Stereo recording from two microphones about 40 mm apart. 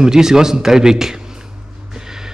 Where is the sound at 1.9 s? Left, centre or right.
Centre.